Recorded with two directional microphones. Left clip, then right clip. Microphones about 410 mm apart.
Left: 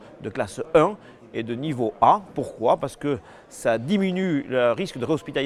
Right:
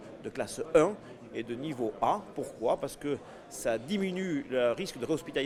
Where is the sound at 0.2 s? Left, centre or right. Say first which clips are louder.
Left 8 dB; left.